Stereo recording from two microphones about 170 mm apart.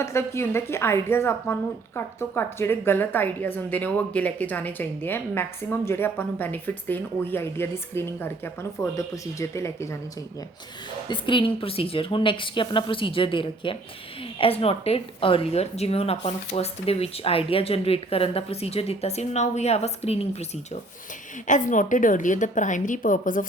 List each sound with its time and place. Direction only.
0.0 s a woman's voice: 15° left (ahead or behind)
11.1 s a woman's voice: 30° left (ahead or behind)
21.4 s a woman's voice: 50° left (ahead or behind)